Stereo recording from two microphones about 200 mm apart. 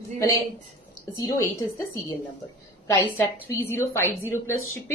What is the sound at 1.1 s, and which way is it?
A woman's voice, 15° left (ahead or behind).